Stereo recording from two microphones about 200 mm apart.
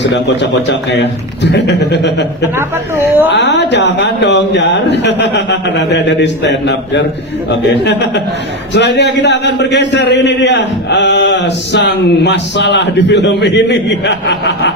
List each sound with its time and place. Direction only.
0.0 s a man's voice: 60° left (ahead or behind)
2.6 s a woman's voice: 10° right (ahead or behind)
3.3 s a man's voice: 60° left (ahead or behind)